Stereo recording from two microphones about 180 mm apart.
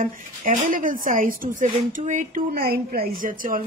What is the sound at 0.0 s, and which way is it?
Speech, 50° right (ahead or behind).